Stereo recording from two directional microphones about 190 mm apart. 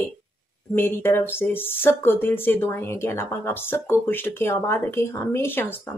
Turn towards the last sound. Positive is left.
turn(degrees=10)  # may be behind; listen again after turning